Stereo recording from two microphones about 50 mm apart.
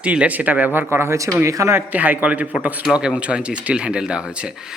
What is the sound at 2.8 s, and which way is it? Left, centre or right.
Speech, centre.